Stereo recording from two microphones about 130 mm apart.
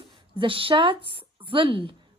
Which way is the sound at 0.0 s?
40° right (ahead or behind).